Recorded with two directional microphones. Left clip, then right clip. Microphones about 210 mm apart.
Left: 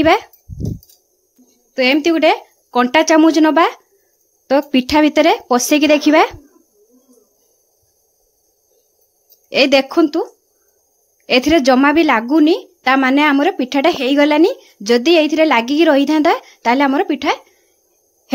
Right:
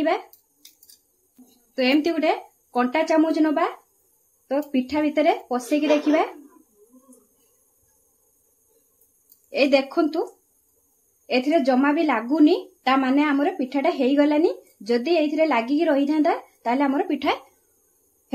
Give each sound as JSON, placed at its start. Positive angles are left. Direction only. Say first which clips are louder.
{"t": 1.8, "sound": "a woman's voice", "louder": "left 8 dB", "side_deg": 35}
{"t": 9.5, "sound": "a woman's voice", "louder": "left 7 dB", "side_deg": 45}
{"t": 11.2, "sound": "a woman's voice", "louder": "left 8 dB", "side_deg": 45}